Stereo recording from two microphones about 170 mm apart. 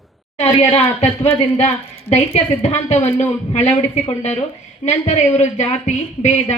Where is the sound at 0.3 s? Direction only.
40° left (ahead or behind).